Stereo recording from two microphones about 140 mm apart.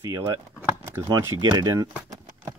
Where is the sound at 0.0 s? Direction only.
25° right (ahead or behind).